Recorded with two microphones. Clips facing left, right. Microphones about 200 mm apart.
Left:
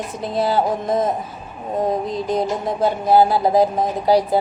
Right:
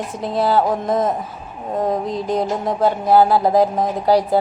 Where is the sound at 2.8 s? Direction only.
15° left (ahead or behind).